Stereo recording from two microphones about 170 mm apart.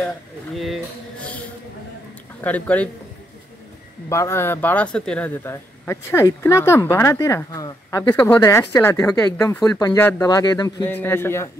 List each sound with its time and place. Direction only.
2.4 s speech: 10° left (ahead or behind)
4.1 s speech: 15° left (ahead or behind)
10.9 s speech: 10° left (ahead or behind)